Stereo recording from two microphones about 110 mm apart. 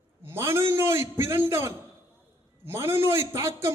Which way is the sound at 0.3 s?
25° right (ahead or behind).